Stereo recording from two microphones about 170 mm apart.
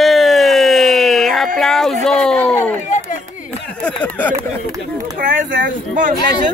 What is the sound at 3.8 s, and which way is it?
Speech, 5° left (ahead or behind).